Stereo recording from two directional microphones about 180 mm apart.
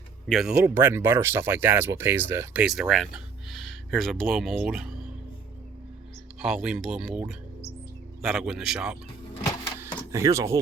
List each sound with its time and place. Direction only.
0.3 s speech: centre (ahead or behind)
6.4 s speech: 5° right (ahead or behind)
9.8 s a sound: 15° right (ahead or behind)